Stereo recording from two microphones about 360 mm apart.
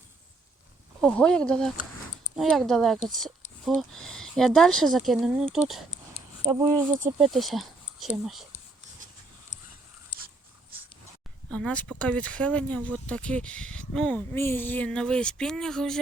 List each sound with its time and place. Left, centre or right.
1.0 s speech: centre
10.2 s dog: right
11.5 s speech: centre